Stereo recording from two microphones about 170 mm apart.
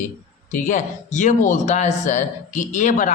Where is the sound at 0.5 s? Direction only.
45° left (ahead or behind).